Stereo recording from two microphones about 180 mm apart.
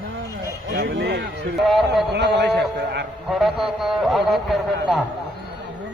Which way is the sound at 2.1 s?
70° right (ahead or behind).